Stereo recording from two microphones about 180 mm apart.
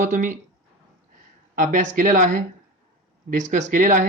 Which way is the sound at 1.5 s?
50° right (ahead or behind).